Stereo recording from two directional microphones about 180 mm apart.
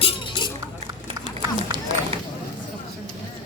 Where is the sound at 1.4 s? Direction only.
25° right (ahead or behind).